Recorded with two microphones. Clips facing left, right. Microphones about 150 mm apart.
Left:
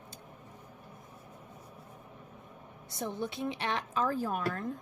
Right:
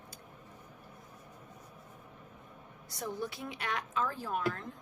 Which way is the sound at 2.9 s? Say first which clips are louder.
Left 2 dB; 25° left (ahead or behind).